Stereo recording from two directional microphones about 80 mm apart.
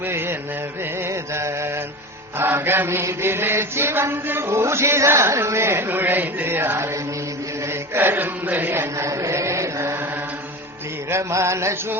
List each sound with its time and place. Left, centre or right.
0.1 s music: right
2.4 s chant: right
7.9 s chant: right
9.0 s chant: right
11.1 s chant: right